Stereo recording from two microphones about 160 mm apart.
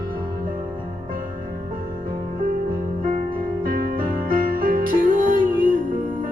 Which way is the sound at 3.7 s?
65° right (ahead or behind).